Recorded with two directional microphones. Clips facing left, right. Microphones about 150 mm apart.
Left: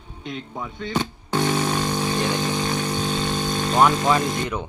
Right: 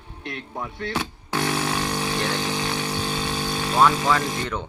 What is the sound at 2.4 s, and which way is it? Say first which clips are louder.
Vehicle: left 3 dB; 5° right (ahead or behind).